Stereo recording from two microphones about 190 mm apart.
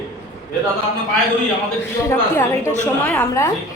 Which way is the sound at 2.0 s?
15° left (ahead or behind).